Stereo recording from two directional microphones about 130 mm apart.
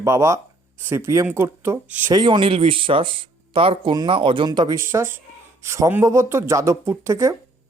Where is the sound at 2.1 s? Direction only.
35° right (ahead or behind).